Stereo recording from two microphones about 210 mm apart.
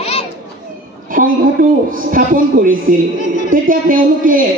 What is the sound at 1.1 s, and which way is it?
A man's voice, 40° right (ahead or behind).